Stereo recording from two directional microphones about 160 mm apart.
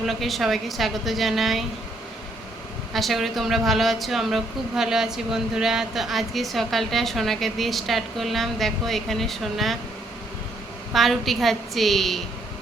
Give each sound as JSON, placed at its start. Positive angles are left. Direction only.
{"t": 0.1, "sound": "a woman's voice", "side_deg": 0}
{"t": 2.9, "sound": "a woman's voice", "side_deg": 0}
{"t": 10.9, "sound": "a woman's voice", "side_deg": 0}